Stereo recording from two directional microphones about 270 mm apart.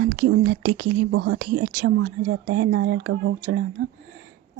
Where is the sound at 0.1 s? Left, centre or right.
Right.